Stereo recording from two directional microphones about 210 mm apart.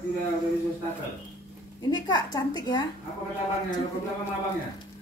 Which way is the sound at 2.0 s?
20° left (ahead or behind).